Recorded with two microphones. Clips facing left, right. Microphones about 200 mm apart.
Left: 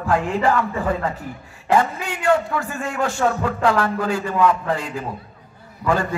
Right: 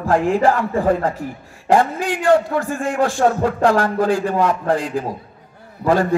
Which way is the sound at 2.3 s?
45° right (ahead or behind).